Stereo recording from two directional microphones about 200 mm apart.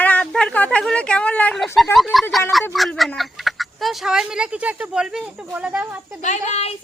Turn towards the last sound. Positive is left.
turn(degrees=30)  # may be behind; listen again after turning